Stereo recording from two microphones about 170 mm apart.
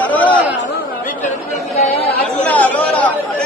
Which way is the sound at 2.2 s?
10° left (ahead or behind).